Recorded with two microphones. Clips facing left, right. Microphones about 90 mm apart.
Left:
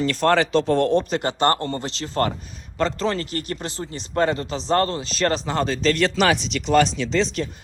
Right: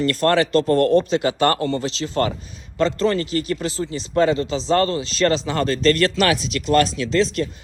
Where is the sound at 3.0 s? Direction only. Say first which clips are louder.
Right 4 dB; centre (ahead or behind).